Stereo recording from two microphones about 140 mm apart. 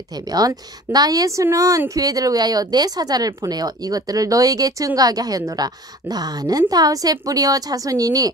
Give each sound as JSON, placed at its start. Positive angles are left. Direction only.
{"t": 0.1, "sound": "a woman's voice", "side_deg": -25}